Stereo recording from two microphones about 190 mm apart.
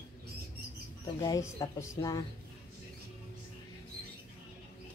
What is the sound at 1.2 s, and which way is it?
Speech, 15° left (ahead or behind).